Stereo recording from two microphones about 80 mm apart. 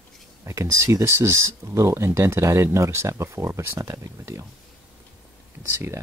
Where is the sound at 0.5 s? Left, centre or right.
Right.